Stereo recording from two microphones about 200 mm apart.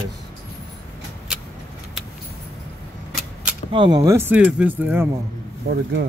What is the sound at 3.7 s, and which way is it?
Speech, 20° right (ahead or behind).